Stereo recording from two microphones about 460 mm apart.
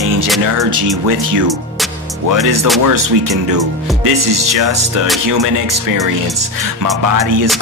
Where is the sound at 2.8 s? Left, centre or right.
Right.